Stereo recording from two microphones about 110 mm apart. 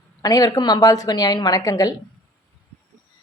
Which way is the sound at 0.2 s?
35° left (ahead or behind).